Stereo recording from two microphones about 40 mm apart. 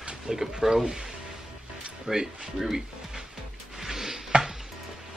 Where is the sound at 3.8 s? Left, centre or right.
Centre.